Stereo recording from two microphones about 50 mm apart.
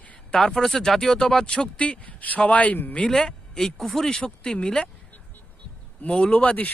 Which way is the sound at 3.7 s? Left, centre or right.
Centre.